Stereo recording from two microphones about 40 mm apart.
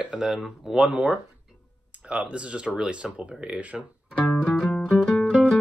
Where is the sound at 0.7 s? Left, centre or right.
Right.